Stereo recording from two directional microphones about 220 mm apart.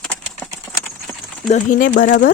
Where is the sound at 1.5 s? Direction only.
35° left (ahead or behind).